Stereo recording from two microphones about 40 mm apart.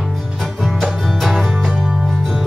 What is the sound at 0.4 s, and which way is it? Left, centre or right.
Music, centre.